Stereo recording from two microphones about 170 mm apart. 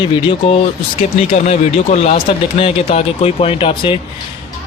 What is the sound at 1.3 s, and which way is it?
A man's voice, 40° left (ahead or behind).